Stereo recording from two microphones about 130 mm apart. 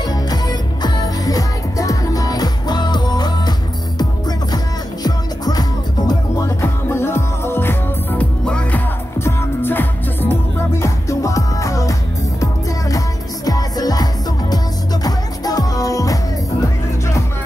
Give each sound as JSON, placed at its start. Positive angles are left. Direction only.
{"t": 0.0, "sound": "music", "side_deg": 30}
{"t": 5.0, "sound": "music", "side_deg": 30}
{"t": 15.0, "sound": "music", "side_deg": 30}